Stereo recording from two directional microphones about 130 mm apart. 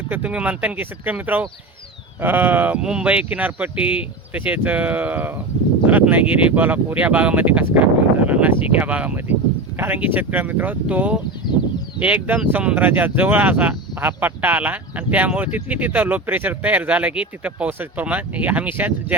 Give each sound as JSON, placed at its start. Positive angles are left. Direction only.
{"t": 0.1, "sound": "speech", "side_deg": -10}